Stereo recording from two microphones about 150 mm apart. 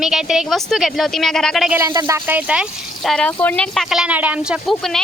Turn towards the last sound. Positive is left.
turn(degrees=0)  # may be behind; listen again after turning